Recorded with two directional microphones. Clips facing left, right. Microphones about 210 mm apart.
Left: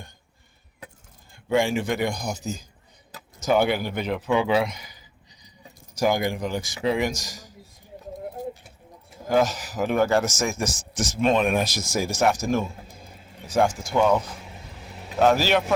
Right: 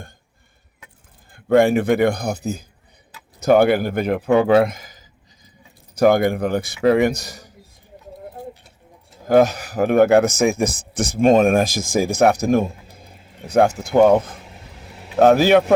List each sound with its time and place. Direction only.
1.3 s a man's voice: 55° right (ahead or behind)
5.9 s a man's voice: 60° right (ahead or behind)
9.3 s a man's voice: 60° right (ahead or behind)